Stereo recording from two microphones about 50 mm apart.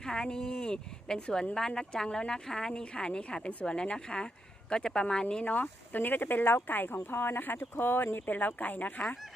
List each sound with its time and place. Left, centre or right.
0.0 s speech: centre
5.2 s speech: left
5.5 s speech: left